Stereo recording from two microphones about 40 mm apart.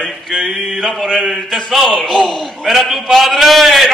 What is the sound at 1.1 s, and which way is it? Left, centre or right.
A man's voice, centre.